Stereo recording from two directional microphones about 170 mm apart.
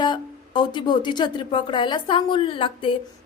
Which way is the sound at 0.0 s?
25° left (ahead or behind).